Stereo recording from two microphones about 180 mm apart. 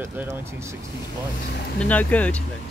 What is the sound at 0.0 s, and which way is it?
Speech, 10° right (ahead or behind).